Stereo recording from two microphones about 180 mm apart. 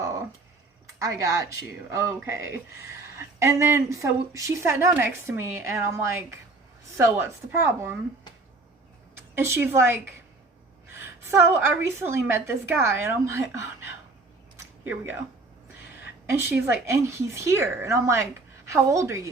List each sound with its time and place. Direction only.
0.9 s speech: 15° right (ahead or behind)
9.1 s a woman's voice: 15° right (ahead or behind)
16.3 s speech: 15° right (ahead or behind)